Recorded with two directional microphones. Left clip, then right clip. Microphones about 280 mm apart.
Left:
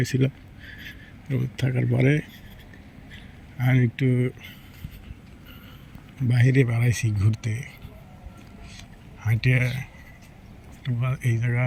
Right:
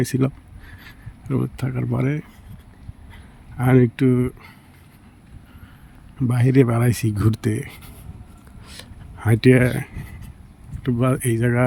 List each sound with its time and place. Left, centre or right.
0.0 s speech: centre
3.6 s speech: centre
6.2 s speech: centre
9.3 s speech: right
10.8 s speech: right